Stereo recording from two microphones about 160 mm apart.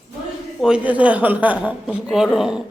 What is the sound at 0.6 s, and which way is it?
A woman's voice, 10° right (ahead or behind).